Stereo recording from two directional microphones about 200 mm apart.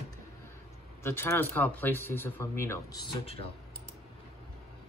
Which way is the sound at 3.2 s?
30° left (ahead or behind).